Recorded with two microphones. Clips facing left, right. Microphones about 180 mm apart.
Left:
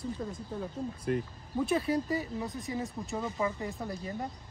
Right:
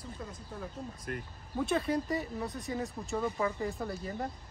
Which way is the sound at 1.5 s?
5° left (ahead or behind).